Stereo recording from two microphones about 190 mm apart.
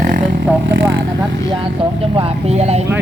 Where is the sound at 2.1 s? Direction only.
35° right (ahead or behind).